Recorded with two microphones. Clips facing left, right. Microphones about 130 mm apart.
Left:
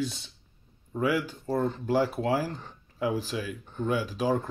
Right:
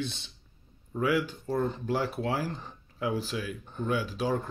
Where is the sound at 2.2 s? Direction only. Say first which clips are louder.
Left 4 dB; 40° left (ahead or behind).